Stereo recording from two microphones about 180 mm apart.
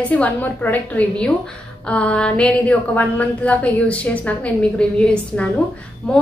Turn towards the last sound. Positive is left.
turn(degrees=5)  # may be behind; listen again after turning